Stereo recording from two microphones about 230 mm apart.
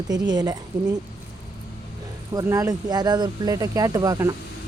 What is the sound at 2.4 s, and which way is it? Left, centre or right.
Speech, centre.